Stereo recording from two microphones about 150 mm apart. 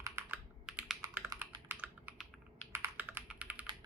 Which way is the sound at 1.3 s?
25° right (ahead or behind).